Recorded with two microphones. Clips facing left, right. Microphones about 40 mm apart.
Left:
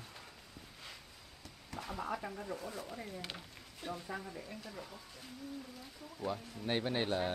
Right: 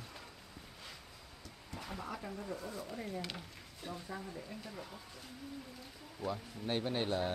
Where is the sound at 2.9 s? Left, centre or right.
Centre.